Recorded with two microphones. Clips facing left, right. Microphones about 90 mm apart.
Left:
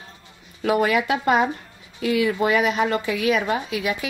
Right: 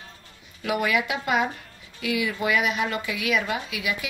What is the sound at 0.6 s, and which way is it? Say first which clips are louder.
Speech: left 5 dB; 35° left (ahead or behind).